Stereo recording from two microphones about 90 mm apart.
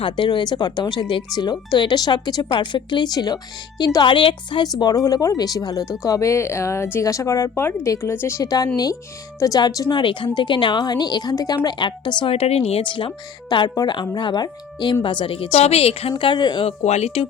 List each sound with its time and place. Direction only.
0.0 s speech: 60° left (ahead or behind)
2.5 s a woman's voice: 60° left (ahead or behind)
4.0 s a woman's voice: 80° left
4.6 s speech: 45° left (ahead or behind); by 8.4 s 30° left (ahead or behind)
8.4 s a woman's voice: 45° left (ahead or behind)
9.9 s a woman's voice: 65° left (ahead or behind)
12.2 s a woman's voice: 90° left; by 14.9 s 55° left (ahead or behind)
15.0 s a woman's voice: 70° left (ahead or behind)
17.2 s speech: 90° left